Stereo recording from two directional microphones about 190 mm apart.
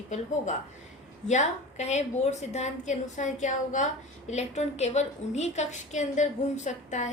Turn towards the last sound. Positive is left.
turn(degrees=40)  # may be behind; listen again after turning